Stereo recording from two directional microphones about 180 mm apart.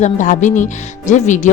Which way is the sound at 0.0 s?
45° left (ahead or behind).